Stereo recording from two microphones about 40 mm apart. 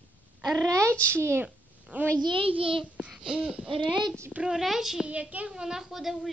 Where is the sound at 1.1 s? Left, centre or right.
Right.